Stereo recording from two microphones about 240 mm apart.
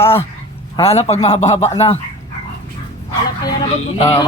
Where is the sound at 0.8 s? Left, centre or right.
Left.